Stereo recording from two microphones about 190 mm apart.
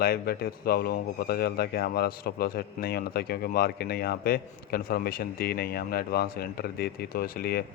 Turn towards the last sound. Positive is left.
turn(degrees=55)  # may be behind; listen again after turning